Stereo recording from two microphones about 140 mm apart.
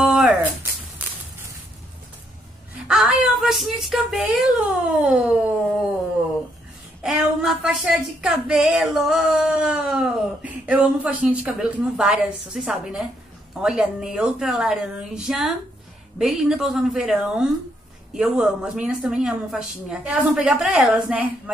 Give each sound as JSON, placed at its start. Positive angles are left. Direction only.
{"t": 0.0, "sound": "a sound", "side_deg": -5}
{"t": 2.9, "sound": "speech", "side_deg": -5}
{"t": 7.0, "sound": "speech", "side_deg": -5}